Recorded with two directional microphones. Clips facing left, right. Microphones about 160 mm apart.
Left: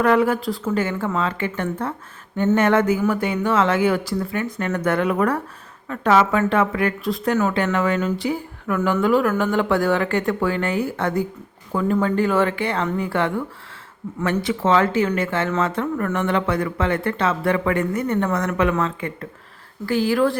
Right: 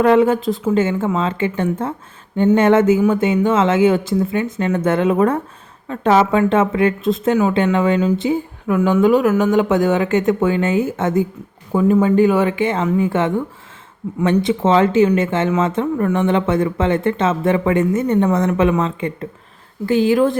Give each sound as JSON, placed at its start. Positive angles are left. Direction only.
{"t": 0.0, "sound": "speech", "side_deg": -25}